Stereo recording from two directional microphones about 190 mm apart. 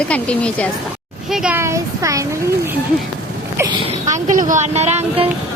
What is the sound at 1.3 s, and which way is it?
Speech, 5° right (ahead or behind).